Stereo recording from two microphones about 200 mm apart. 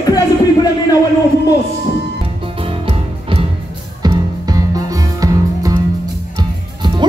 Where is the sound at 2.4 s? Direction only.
25° right (ahead or behind).